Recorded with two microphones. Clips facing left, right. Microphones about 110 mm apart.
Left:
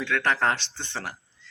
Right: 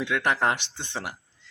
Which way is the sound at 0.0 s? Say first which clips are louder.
Even; 15° right (ahead or behind).